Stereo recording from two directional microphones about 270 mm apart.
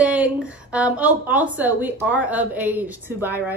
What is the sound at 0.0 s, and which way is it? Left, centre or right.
A woman's voice, centre.